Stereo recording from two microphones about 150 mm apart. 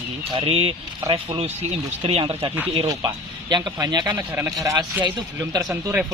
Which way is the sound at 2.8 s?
25° right (ahead or behind).